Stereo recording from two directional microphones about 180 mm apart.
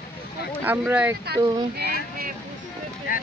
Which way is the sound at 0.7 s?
10° right (ahead or behind).